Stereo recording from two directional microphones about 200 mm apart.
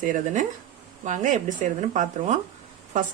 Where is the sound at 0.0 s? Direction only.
40° right (ahead or behind).